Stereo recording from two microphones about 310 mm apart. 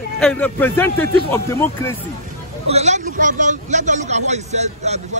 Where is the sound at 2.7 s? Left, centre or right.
Right.